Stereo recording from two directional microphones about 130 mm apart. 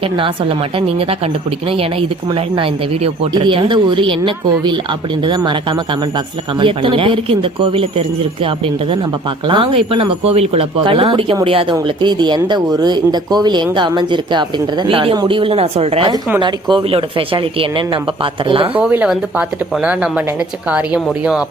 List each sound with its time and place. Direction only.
0.2 s speech: 40° right (ahead or behind)
6.6 s speech: 40° right (ahead or behind)
16.4 s speech: 40° right (ahead or behind)
18.7 s speech: 15° right (ahead or behind)